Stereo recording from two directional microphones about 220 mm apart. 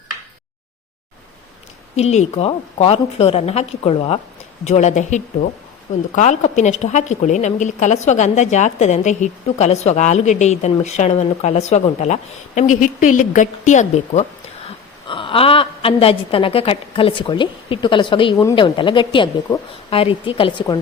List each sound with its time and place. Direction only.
2.0 s a woman's voice: 30° left (ahead or behind)